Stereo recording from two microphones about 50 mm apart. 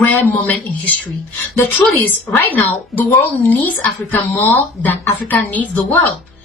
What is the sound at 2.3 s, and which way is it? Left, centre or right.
Speech, left.